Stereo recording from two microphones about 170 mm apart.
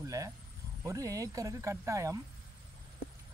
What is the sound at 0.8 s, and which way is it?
Speech, 20° right (ahead or behind).